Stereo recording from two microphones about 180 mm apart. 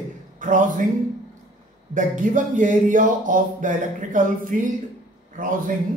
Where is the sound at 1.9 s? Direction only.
45° right (ahead or behind).